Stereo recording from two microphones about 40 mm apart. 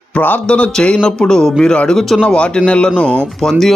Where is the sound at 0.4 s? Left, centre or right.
Left; by 2.1 s centre.